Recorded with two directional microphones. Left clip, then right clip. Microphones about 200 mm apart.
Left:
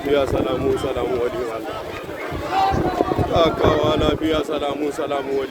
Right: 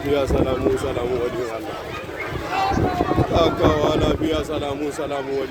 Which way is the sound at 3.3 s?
25° right (ahead or behind).